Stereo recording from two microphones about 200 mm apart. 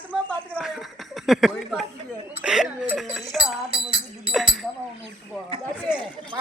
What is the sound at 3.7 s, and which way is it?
Music, 25° right (ahead or behind).